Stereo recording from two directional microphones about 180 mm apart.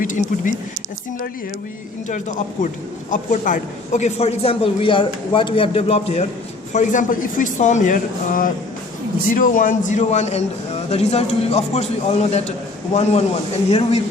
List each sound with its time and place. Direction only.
0.0 s speech: 45° left (ahead or behind)
2.0 s a man's voice: 45° left (ahead or behind)
6.7 s a man's voice: 45° left (ahead or behind)